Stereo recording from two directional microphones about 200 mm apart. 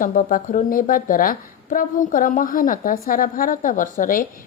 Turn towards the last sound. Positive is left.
turn(degrees=40)  # may be behind; listen again after turning